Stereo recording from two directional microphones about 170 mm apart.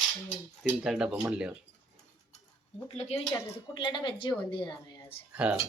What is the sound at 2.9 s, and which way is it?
Speech, 35° left (ahead or behind).